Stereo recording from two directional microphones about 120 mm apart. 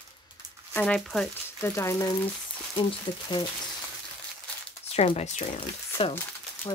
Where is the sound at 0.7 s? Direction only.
10° left (ahead or behind).